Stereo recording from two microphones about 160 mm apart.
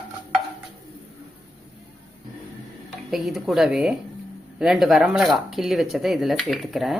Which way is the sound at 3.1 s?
Centre (ahead or behind).